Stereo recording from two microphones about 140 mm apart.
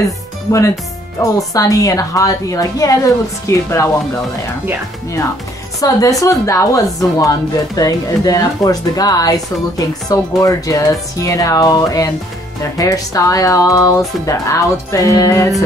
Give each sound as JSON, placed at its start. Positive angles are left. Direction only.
{"t": 1.5, "sound": "speech", "side_deg": 25}
{"t": 5.8, "sound": "speech", "side_deg": 25}